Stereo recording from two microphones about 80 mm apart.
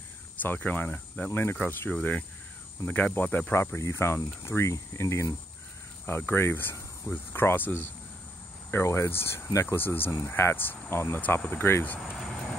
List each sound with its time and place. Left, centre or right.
0.4 s speech: left
3.5 s speech: left
9.8 s speech: left
12.2 s vehicle: centre